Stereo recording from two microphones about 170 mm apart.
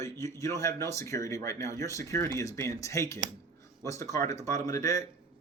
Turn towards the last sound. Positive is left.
turn(degrees=20)  # may be behind; listen again after turning